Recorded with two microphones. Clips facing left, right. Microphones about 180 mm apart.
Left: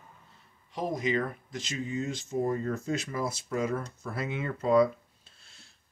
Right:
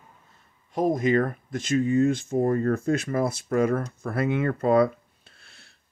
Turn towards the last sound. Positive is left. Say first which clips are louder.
# right 4 dB
turn(degrees=-65)  # may be behind; listen again after turning